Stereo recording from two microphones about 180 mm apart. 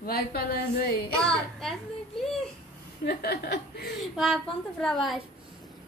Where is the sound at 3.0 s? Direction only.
65° left (ahead or behind).